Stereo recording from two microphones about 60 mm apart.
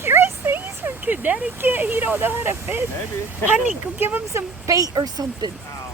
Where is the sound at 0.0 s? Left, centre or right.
Right.